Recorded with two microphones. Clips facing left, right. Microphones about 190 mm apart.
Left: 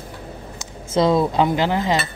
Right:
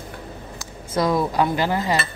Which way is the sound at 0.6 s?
25° left (ahead or behind).